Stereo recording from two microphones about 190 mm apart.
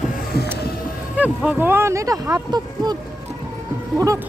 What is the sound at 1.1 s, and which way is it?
Speech, 5° right (ahead or behind).